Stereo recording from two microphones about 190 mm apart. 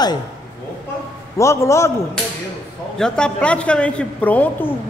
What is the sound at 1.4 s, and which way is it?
Speech, 15° left (ahead or behind).